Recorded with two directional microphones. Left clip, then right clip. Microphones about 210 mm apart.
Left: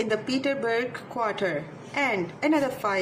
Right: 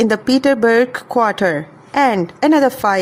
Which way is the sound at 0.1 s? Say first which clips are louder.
Right 12 dB; 60° right (ahead or behind).